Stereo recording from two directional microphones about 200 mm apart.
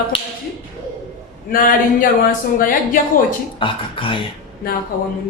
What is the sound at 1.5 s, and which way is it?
Speech, 45° left (ahead or behind).